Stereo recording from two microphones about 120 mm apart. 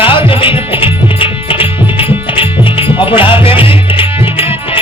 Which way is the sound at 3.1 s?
45° left (ahead or behind).